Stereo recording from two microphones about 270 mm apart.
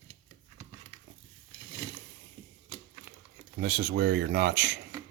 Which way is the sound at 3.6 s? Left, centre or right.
Right.